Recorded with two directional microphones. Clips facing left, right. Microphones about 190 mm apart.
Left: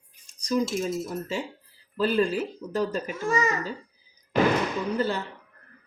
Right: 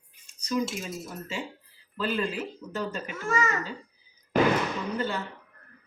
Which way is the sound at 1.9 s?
40° left (ahead or behind).